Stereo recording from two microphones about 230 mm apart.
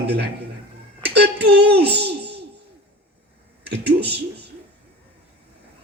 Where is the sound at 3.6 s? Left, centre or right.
Right.